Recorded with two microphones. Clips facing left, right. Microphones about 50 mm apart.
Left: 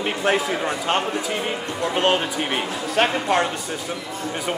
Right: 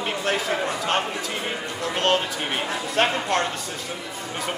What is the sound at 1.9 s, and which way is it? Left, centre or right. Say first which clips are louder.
Speech: left 2 dB; centre.